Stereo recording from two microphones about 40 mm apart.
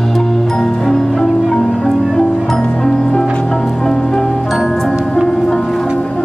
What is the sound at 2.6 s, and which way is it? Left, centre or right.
Music, left.